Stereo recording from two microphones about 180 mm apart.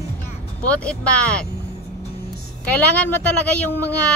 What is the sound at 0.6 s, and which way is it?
Speech, 5° left (ahead or behind).